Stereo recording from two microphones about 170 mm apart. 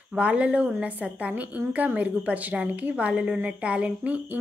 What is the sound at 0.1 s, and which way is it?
Speech, 5° right (ahead or behind).